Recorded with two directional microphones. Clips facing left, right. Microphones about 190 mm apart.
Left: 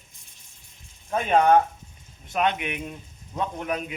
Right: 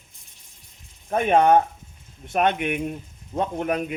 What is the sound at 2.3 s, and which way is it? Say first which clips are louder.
Speech: right 3 dB; 50° right (ahead or behind).